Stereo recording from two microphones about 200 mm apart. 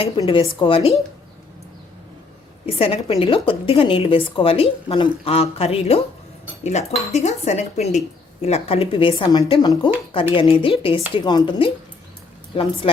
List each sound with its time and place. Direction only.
0.0 s a woman's voice: 25° left (ahead or behind)
2.6 s a woman's voice: 30° left (ahead or behind)